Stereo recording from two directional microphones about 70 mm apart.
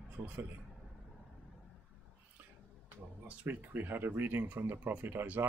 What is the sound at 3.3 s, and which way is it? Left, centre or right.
Speech, right.